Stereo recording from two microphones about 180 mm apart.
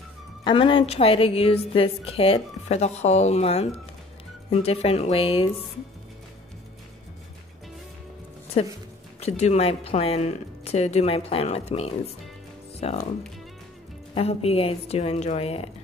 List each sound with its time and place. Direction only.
0.4 s a woman's voice: 25° left (ahead or behind)
8.6 s a woman's voice: 35° left (ahead or behind)
14.1 s a woman's voice: 35° left (ahead or behind)